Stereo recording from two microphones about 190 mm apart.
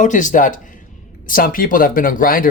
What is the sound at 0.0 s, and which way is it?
A man's voice, 40° left (ahead or behind).